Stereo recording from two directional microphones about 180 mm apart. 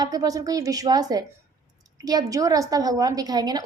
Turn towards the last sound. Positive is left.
turn(degrees=-20)  # may be behind; listen again after turning